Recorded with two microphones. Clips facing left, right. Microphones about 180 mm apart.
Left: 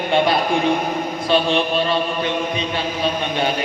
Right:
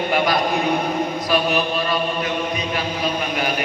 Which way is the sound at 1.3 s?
25° left (ahead or behind).